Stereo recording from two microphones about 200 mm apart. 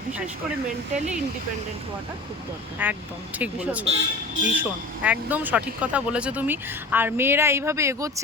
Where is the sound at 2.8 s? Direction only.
10° right (ahead or behind).